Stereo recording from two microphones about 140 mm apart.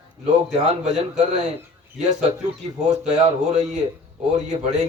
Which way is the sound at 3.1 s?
55° right (ahead or behind).